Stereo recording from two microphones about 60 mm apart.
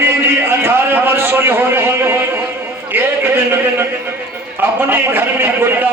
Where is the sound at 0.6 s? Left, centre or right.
Right.